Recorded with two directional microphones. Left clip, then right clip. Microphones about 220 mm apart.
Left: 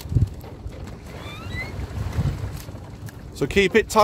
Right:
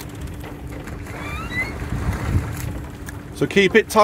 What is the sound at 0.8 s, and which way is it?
Boat, 10° right (ahead or behind).